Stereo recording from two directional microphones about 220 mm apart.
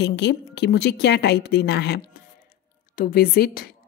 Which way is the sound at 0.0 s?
50° left (ahead or behind).